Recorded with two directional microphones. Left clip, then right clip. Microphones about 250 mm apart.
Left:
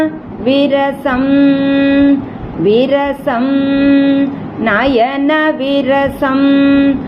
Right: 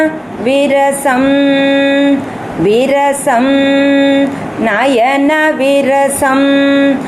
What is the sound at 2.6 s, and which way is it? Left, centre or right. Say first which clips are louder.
Speech: even; centre.